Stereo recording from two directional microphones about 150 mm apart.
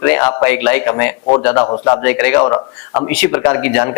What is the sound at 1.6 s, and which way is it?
Speech, 25° left (ahead or behind).